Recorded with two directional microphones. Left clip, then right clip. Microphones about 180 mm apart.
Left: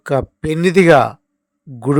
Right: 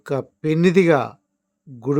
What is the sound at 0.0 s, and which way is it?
A man's voice, 30° left (ahead or behind).